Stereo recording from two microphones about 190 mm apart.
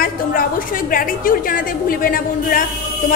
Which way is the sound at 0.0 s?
50° left (ahead or behind).